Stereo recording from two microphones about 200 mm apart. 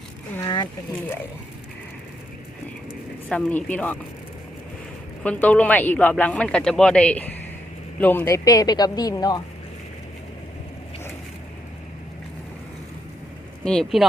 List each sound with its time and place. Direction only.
0.3 s a sound: 20° left (ahead or behind)
3.2 s speech: 5° left (ahead or behind)
5.2 s speech: 5° left (ahead or behind)
13.7 s speech: 5° left (ahead or behind)